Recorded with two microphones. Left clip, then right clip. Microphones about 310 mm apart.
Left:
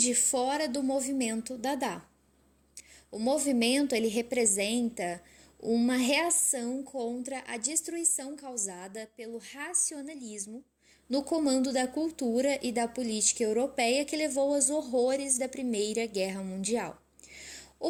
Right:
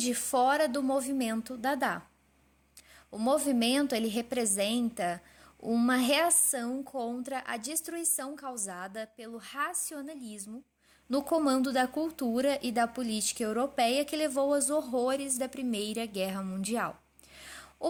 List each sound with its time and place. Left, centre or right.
0.0 s speech: right
3.2 s speech: right
17.3 s a sound: right